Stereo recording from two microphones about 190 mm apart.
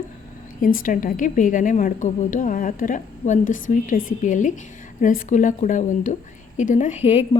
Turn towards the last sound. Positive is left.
turn(degrees=30)  # may be behind; listen again after turning